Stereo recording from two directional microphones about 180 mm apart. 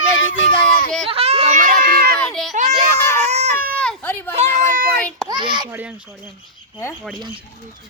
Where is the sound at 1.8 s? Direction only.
55° right (ahead or behind).